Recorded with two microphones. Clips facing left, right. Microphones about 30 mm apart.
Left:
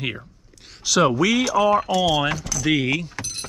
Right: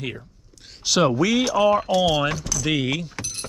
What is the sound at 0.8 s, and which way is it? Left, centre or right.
Speech, centre.